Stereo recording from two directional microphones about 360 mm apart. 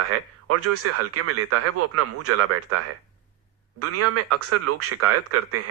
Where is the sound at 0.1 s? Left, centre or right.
Right.